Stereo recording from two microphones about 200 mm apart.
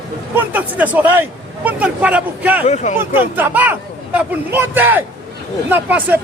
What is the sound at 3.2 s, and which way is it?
Speech, 10° right (ahead or behind).